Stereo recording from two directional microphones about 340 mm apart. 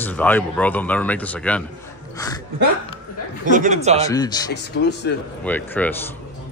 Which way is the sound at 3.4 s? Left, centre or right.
Right.